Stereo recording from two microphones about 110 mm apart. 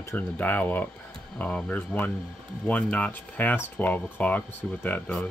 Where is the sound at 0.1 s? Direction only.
15° left (ahead or behind).